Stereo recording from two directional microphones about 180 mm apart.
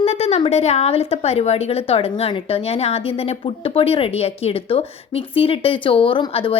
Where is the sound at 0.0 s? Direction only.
35° left (ahead or behind).